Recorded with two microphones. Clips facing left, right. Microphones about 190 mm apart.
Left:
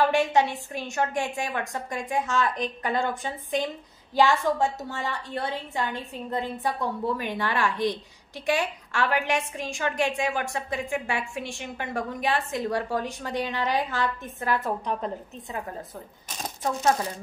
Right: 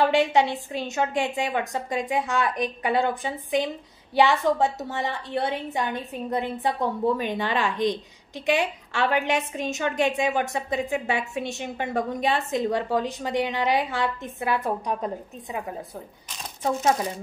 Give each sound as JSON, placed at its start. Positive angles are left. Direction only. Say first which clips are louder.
{"t": 0.1, "sound": "a woman's voice", "louder": "right 2 dB", "side_deg": -15}